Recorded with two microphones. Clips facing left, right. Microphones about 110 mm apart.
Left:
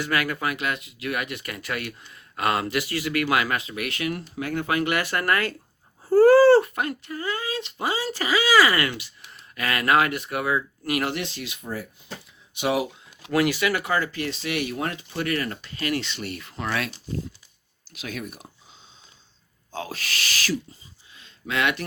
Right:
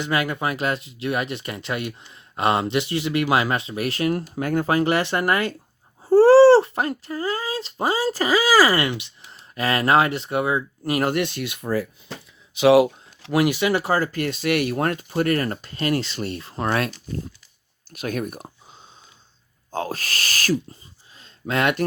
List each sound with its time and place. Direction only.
0.0 s speech: 25° right (ahead or behind)
8.9 s speech: 20° right (ahead or behind)
11.1 s speech: 60° right (ahead or behind); by 12.9 s 80° right
13.3 s speech: 20° right (ahead or behind); by 16.9 s 40° right (ahead or behind)
17.9 s a sound: 50° right (ahead or behind)
19.7 s speech: 45° right (ahead or behind)
21.1 s a sound: 35° right (ahead or behind)